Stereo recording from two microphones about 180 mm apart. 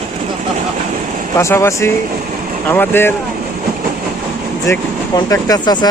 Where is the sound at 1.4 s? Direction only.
15° left (ahead or behind).